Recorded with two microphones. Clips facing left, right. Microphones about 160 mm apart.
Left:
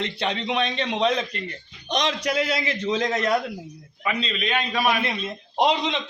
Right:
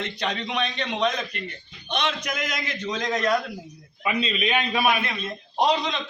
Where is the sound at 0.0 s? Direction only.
25° left (ahead or behind).